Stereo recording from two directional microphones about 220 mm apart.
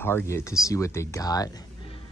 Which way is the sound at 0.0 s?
10° left (ahead or behind).